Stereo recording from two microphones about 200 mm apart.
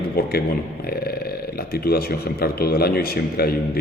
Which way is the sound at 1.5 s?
50° left (ahead or behind).